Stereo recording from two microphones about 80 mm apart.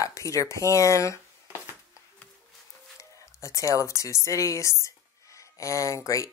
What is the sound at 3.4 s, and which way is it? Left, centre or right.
Speech, left.